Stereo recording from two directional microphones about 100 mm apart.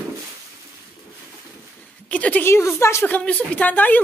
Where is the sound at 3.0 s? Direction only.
15° left (ahead or behind).